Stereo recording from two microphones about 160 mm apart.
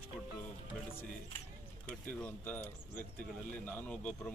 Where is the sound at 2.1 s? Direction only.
10° left (ahead or behind).